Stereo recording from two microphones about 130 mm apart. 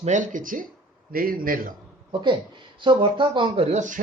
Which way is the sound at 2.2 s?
40° right (ahead or behind).